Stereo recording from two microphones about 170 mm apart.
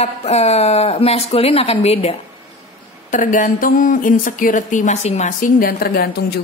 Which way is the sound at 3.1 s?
50° left (ahead or behind).